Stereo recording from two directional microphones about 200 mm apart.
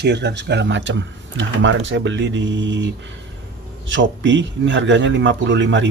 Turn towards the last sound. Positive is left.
turn(degrees=-65)  # may be behind; listen again after turning